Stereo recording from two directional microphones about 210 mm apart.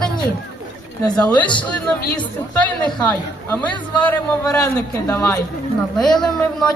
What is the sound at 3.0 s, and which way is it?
A man's voice, 5° left (ahead or behind).